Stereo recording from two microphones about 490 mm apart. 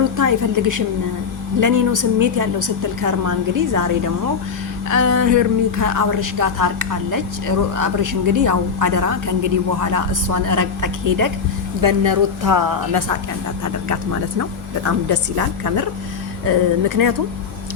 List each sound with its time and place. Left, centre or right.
0.2 s a woman's voice: right